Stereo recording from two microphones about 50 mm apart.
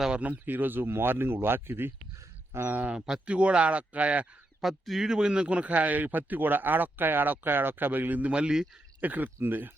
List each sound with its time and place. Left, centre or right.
0.2 s speech: right
2.6 s speech: right
4.6 s speech: centre; by 8.3 s right
8.3 s speech: centre
9.0 s speech: right